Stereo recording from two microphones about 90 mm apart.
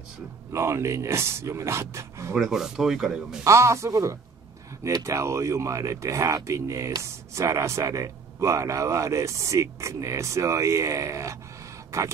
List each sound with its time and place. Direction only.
0.5 s a man's voice: 30° right (ahead or behind)
2.3 s speech: 5° right (ahead or behind)
3.4 s a man's voice: 35° right (ahead or behind)